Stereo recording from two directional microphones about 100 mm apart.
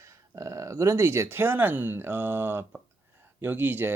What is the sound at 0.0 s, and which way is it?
Speech, 30° right (ahead or behind).